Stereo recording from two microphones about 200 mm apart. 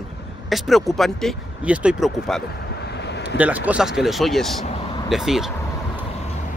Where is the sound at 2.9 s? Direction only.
55° left (ahead or behind).